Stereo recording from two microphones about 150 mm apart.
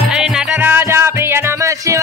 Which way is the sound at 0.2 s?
10° right (ahead or behind).